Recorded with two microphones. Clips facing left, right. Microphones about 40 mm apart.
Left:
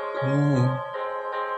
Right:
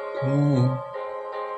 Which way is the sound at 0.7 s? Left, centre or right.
Left.